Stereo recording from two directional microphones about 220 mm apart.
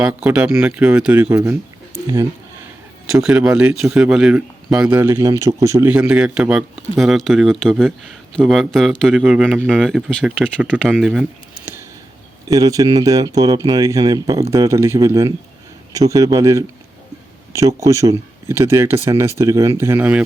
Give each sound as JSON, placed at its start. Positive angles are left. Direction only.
{"t": 0.0, "sound": "a man's voice", "side_deg": -5}
{"t": 3.1, "sound": "a man's voice", "side_deg": 0}
{"t": 12.5, "sound": "speech", "side_deg": -15}